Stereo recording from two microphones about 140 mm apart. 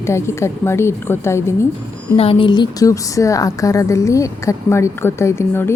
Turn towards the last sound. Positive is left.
turn(degrees=15)  # may be behind; listen again after turning